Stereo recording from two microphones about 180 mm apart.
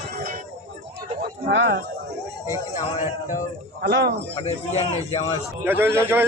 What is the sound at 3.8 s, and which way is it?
Speech, 70° right (ahead or behind).